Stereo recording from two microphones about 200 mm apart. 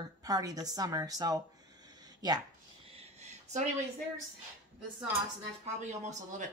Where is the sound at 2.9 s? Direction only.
30° right (ahead or behind).